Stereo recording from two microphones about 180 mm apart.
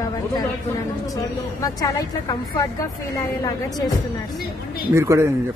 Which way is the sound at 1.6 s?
20° left (ahead or behind).